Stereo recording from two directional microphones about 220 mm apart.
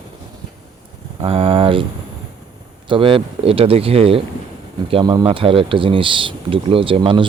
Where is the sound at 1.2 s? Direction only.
25° right (ahead or behind).